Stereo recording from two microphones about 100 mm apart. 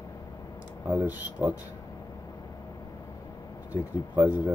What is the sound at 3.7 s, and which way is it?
Speech, 15° right (ahead or behind).